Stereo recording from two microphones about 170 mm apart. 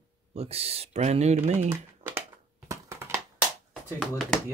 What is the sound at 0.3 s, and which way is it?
Speech, 35° right (ahead or behind).